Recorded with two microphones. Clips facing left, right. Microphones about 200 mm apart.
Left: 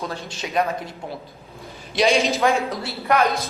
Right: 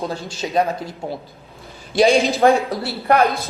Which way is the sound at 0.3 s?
30° right (ahead or behind).